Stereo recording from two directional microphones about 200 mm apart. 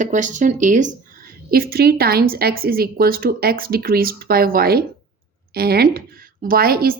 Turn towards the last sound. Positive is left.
turn(degrees=-50)  # may be behind; listen again after turning